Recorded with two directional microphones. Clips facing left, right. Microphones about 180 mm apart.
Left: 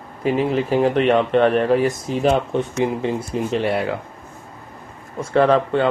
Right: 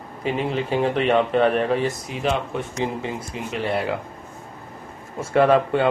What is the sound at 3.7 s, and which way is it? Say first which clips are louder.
Speech: left 2 dB; centre (ahead or behind).